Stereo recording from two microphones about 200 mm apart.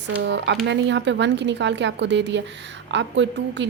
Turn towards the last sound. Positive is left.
turn(degrees=-65)  # may be behind; listen again after turning